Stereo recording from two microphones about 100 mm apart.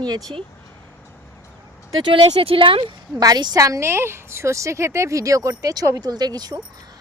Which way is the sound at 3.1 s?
40° right (ahead or behind).